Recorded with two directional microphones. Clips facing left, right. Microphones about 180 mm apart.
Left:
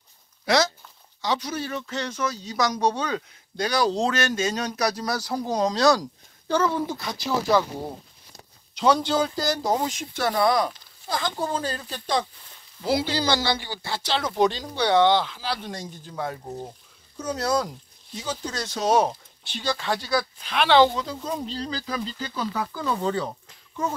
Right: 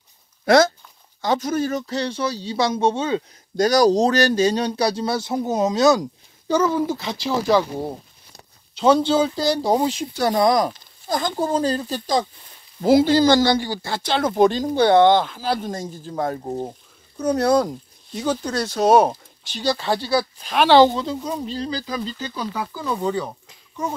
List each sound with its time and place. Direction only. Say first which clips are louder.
0.5 s speech: right 7 dB; 50° right (ahead or behind); by 3.3 s 25° right (ahead or behind)
3.5 s speech: right 8 dB; 45° right (ahead or behind); by 6.5 s 20° right (ahead or behind)
6.5 s speech: right 4 dB; 10° right (ahead or behind)
7.0 s speech: right 3 dB; 25° right (ahead or behind)
9.8 s speech: right 6 dB; 35° right (ahead or behind)
12.8 s speech: right 10 dB; 50° right (ahead or behind)
17.2 s speech: right 7 dB; 60° right (ahead or behind)
19.4 s speech: right 5 dB; 35° right (ahead or behind)
20.4 s speech: right 5 dB; 40° right (ahead or behind)
21.3 s speech: right 3 dB; 10° right (ahead or behind)